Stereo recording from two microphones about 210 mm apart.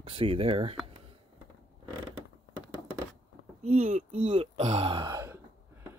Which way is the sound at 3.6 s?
30° right (ahead or behind).